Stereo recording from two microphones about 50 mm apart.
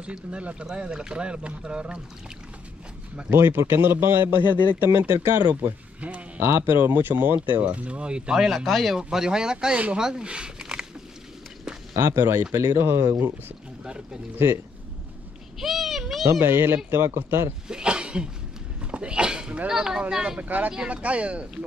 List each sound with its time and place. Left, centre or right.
0.0 s speech: right
3.3 s a man's voice: right
4.9 s a man's voice: right
5.9 s speech: right
6.4 s speech: right; by 8.5 s centre
8.5 s speech: centre
12.0 s a man's voice: right
12.5 s speech: right
15.6 s a sound: centre
16.3 s speech: right
17.6 s a sound: centre
19.7 s speech: centre
20.3 s speech: right